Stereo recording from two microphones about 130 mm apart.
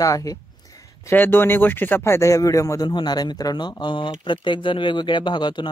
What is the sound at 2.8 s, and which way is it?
Speech, 35° left (ahead or behind).